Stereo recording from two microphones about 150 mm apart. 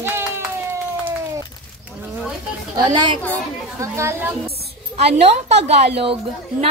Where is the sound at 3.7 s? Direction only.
20° right (ahead or behind).